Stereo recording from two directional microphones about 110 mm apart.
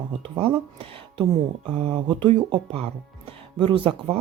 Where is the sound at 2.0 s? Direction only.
45° right (ahead or behind).